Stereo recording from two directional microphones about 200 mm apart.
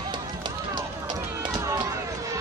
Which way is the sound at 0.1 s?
20° right (ahead or behind).